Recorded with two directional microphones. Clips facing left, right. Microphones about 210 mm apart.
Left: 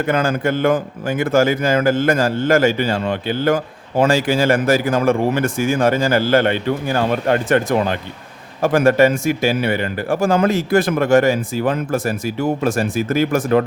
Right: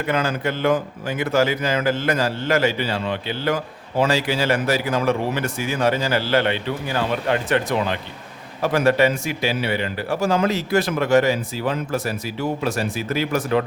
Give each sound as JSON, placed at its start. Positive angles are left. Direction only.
{"t": 0.0, "sound": "a man's voice", "side_deg": 45}